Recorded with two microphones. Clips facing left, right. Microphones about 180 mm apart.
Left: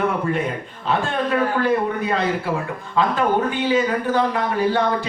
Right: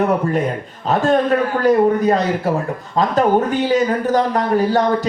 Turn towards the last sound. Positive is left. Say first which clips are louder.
# right 4 dB
turn(degrees=-40)  # may be behind; listen again after turning